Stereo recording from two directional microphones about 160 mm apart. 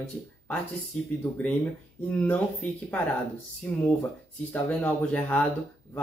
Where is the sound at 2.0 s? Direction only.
10° left (ahead or behind).